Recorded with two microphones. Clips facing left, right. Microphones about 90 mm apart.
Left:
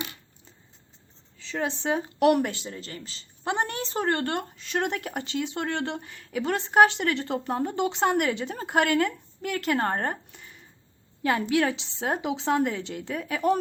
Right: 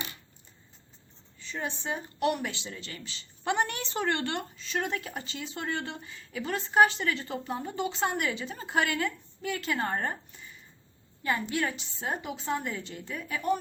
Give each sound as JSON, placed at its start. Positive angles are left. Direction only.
{"t": 1.4, "sound": "a woman's voice", "side_deg": 90}
{"t": 2.5, "sound": "a woman's voice", "side_deg": 40}